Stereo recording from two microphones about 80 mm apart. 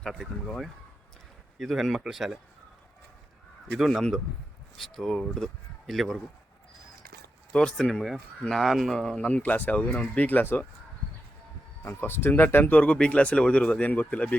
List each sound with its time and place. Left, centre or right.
0.0 s speech: centre
3.8 s speech: centre
7.5 s speech: centre
9.3 s speech: left
11.9 s speech: left